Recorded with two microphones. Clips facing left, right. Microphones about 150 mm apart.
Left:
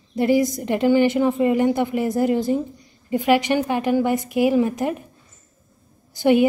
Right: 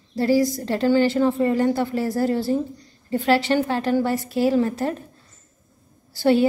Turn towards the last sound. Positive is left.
turn(degrees=20)  # may be behind; listen again after turning